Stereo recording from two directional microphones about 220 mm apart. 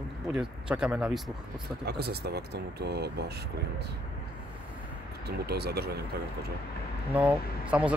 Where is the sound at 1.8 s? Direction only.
45° right (ahead or behind).